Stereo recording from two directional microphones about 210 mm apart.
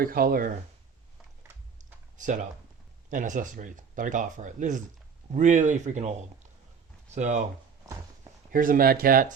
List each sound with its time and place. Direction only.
0.0 s speech: 45° right (ahead or behind)
2.1 s speech: 35° right (ahead or behind)
8.5 s speech: 40° right (ahead or behind)